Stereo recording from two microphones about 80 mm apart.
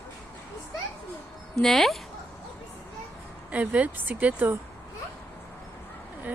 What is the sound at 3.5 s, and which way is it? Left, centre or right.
Speech, centre.